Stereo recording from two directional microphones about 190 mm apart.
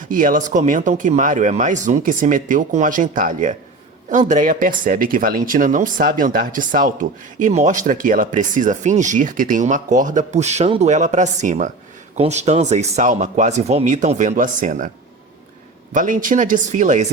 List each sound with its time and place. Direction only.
0.1 s speech: 45° right (ahead or behind)
15.9 s speech: 45° right (ahead or behind)